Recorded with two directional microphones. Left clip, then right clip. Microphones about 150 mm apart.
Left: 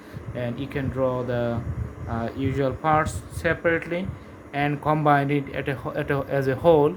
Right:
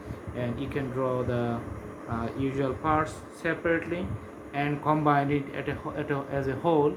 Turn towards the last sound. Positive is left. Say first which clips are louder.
# left 6 dB
turn(degrees=65)  # may be behind; listen again after turning